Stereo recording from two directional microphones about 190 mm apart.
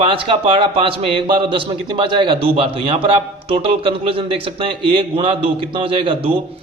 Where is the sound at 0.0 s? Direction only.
25° right (ahead or behind).